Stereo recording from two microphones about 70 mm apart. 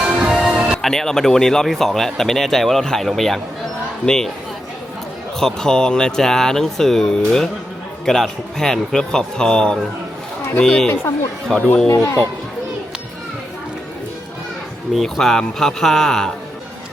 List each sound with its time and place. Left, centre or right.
0.0 s music: centre
0.3 s music: centre
0.9 s speech: centre
5.4 s speech: centre
11.9 s speech: left
14.9 s speech: centre